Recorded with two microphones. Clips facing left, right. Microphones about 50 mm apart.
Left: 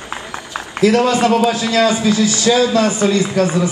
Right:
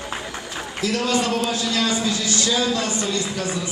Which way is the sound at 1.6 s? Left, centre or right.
Left.